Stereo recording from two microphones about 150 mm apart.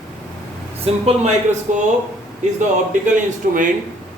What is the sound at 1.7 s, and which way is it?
Speech, 55° right (ahead or behind).